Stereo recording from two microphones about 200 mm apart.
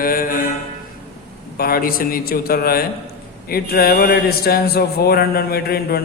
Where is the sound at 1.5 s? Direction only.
50° left (ahead or behind).